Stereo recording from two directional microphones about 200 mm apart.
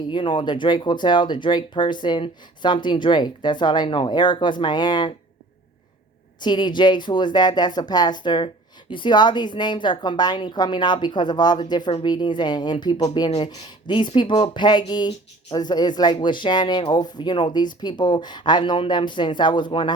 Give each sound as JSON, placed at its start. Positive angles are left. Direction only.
{"t": 0.1, "sound": "a woman's voice", "side_deg": 25}
{"t": 6.4, "sound": "a woman's voice", "side_deg": 20}